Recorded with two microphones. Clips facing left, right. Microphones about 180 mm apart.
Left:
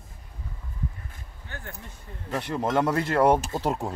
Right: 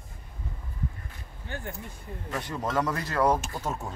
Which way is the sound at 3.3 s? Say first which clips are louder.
Left 5 dB; 25° left (ahead or behind).